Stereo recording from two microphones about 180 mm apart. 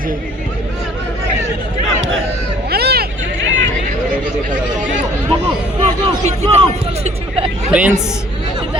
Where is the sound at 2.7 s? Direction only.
60° right (ahead or behind).